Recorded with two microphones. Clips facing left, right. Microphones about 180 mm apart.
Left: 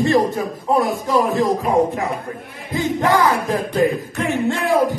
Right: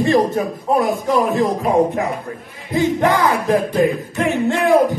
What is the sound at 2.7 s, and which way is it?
Speech, 15° right (ahead or behind).